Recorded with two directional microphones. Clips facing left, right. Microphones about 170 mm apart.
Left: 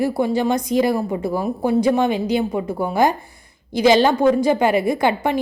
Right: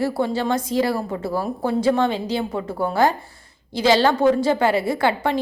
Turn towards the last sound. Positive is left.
turn(degrees=15)  # may be behind; listen again after turning